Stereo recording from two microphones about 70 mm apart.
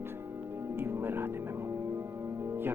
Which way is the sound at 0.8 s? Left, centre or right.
Right.